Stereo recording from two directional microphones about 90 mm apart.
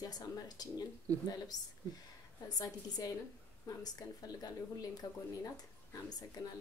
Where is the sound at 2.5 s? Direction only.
45° left (ahead or behind).